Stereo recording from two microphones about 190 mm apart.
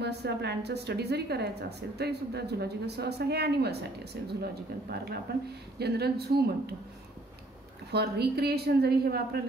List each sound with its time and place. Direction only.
0.0 s a woman's voice: 60° right (ahead or behind)
7.9 s a woman's voice: 60° right (ahead or behind)